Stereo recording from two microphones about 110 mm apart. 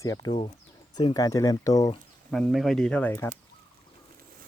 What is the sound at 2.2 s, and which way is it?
Speech, 10° left (ahead or behind).